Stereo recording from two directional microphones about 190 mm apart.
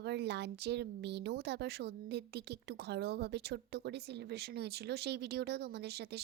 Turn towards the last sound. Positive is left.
turn(degrees=-60)  # may be behind; listen again after turning